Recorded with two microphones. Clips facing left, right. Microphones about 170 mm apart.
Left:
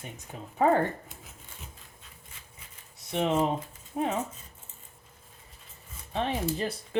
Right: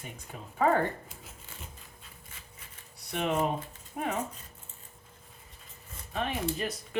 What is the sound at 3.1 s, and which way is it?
Speech, 25° left (ahead or behind).